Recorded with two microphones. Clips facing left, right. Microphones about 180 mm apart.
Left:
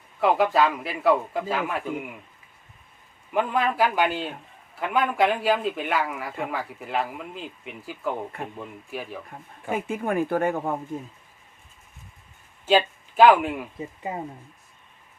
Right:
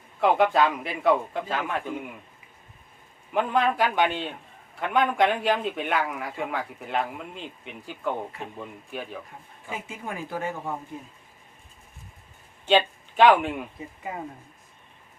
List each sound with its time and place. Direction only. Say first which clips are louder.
0.2 s speech: even; centre (ahead or behind)
3.3 s speech: even; centre (ahead or behind)
9.6 s speech: left 9 dB; 55° left (ahead or behind)
12.6 s speech: left 1 dB; 5° left (ahead or behind)
14.0 s speech: left 2 dB; 20° left (ahead or behind)